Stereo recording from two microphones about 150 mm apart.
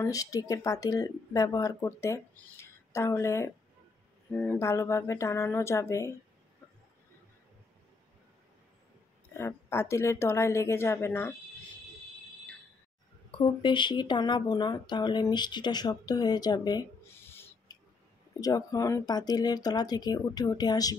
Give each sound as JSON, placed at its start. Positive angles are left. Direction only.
{"t": 0.0, "sound": "speech", "side_deg": 25}
{"t": 9.4, "sound": "a woman's voice", "side_deg": 15}
{"t": 13.3, "sound": "speech", "side_deg": 35}